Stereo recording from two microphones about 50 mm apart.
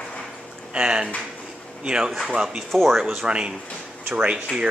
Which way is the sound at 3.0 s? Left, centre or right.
Centre.